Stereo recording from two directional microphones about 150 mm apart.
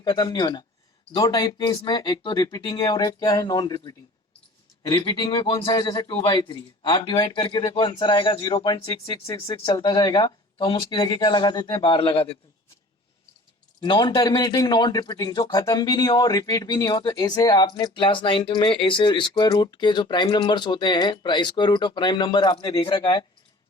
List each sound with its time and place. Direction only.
0.0 s a man's voice: 25° left (ahead or behind)
13.8 s speech: 30° left (ahead or behind)